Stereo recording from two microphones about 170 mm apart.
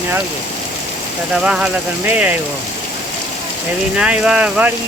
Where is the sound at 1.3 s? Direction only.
5° right (ahead or behind).